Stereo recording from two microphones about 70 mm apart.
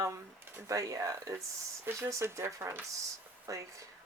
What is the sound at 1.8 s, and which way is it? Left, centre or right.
Speech, right.